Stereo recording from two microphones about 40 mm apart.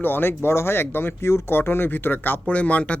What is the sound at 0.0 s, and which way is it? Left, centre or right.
Speech, left.